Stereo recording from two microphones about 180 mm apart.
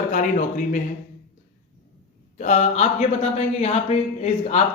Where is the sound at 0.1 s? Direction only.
45° left (ahead or behind).